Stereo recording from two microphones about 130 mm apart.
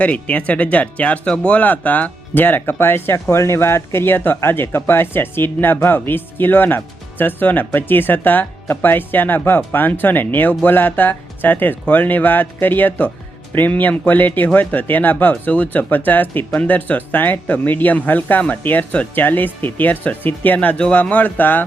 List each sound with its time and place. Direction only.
0.0 s speech: 10° left (ahead or behind)